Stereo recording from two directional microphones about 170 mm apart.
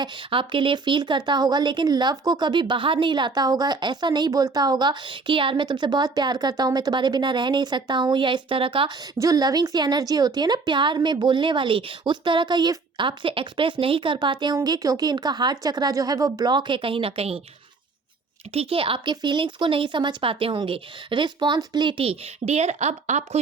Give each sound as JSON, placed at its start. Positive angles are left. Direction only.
{"t": 0.0, "sound": "speech", "side_deg": -30}
{"t": 18.5, "sound": "speech", "side_deg": -35}